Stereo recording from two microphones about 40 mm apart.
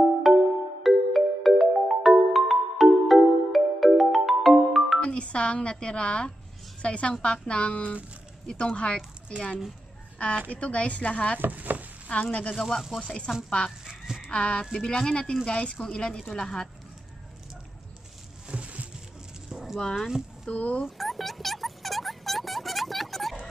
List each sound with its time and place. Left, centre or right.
0.3 s music: centre
5.0 s speech: left
8.5 s speech: left
10.1 s a woman's voice: left
11.3 s stir: right
12.1 s speech: left
12.5 s speech: centre
13.0 s speech: centre
13.7 s goose: centre
14.3 s speech: left
18.5 s a sound: right
19.5 s a sound: centre
20.5 s speech: left
20.8 s a sound: centre